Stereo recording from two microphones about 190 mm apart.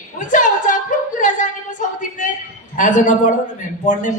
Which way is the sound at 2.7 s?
40° left (ahead or behind).